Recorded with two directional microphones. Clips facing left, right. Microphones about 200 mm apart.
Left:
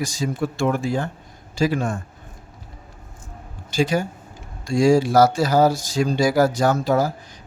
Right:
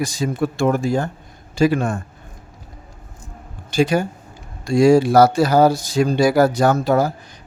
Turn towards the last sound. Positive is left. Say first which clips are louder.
# right 3 dB
turn(degrees=-60)  # may be behind; listen again after turning